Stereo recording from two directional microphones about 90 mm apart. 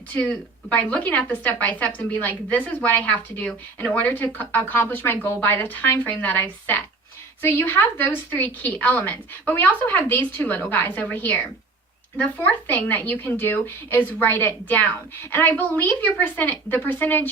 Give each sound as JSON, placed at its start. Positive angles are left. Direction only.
{"t": 0.7, "sound": "speech", "side_deg": 15}